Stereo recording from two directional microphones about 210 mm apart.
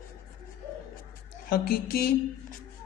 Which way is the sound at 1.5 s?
45° left (ahead or behind).